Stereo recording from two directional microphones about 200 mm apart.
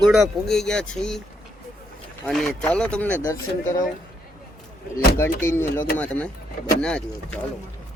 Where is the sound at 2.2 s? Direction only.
Centre (ahead or behind).